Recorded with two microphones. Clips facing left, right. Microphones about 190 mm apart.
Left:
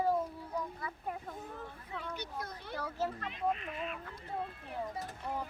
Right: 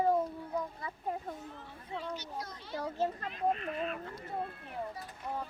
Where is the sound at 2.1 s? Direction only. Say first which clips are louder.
Even; 55° left (ahead or behind).